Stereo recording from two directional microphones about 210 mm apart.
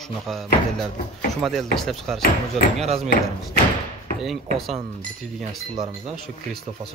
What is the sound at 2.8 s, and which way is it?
Speech, 30° right (ahead or behind).